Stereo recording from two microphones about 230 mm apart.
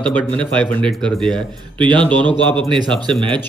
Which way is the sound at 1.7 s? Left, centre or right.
Right.